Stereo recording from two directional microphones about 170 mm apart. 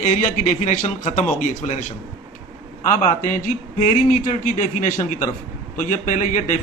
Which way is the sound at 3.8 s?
50° left (ahead or behind).